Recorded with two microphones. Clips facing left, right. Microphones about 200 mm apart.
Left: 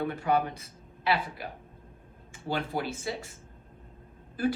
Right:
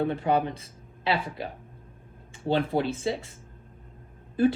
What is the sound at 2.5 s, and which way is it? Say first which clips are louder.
Speech: right 6 dB; 30° right (ahead or behind).